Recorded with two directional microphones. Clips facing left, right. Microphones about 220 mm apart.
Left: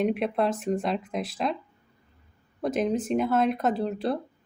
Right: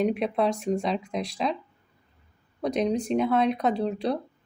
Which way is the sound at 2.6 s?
5° left (ahead or behind).